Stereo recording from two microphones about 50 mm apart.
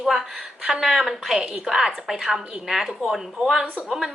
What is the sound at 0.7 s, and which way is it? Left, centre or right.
A woman's voice, centre.